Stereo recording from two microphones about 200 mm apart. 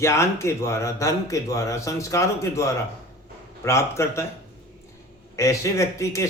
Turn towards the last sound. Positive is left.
turn(degrees=15)  # may be behind; listen again after turning